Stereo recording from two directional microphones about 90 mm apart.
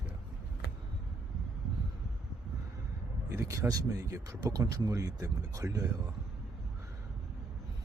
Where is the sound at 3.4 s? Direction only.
40° right (ahead or behind).